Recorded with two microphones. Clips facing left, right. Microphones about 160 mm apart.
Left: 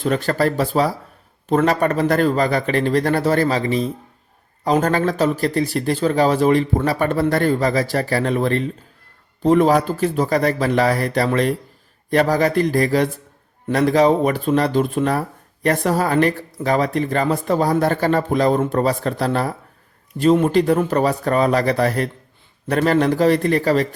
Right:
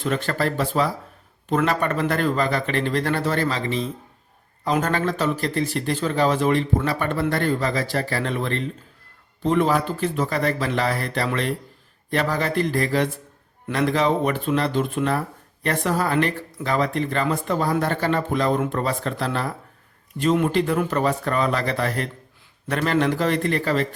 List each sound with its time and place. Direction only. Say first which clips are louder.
0.0 s speech: left 5 dB; 40° left (ahead or behind)
4.6 s speech: left 5 dB; 40° left (ahead or behind)